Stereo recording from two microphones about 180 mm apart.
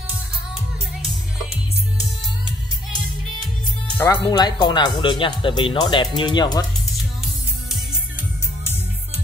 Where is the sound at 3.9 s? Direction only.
20° left (ahead or behind).